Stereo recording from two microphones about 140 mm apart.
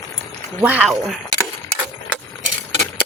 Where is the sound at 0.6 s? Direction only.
5° right (ahead or behind).